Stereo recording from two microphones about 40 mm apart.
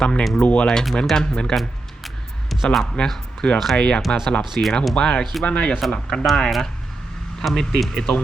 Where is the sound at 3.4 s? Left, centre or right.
Left.